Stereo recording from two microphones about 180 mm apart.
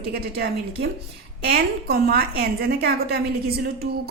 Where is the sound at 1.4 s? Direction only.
60° right (ahead or behind).